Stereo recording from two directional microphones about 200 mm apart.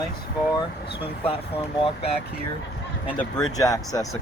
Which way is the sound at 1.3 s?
25° left (ahead or behind).